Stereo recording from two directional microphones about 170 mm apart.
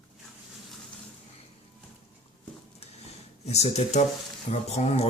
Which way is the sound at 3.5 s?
40° left (ahead or behind).